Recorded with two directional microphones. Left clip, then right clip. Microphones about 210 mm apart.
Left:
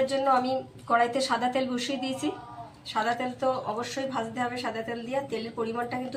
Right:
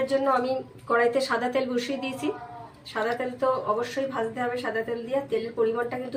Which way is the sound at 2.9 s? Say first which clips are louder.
Right 1 dB; 30° right (ahead or behind).